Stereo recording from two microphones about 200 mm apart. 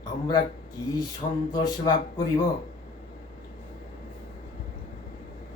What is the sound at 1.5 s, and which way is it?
Speech, 20° left (ahead or behind).